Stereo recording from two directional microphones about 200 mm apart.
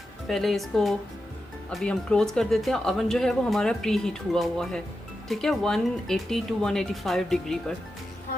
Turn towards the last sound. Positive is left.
turn(degrees=5)  # may be behind; listen again after turning